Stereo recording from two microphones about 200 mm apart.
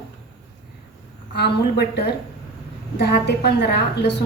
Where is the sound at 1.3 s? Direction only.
55° left (ahead or behind).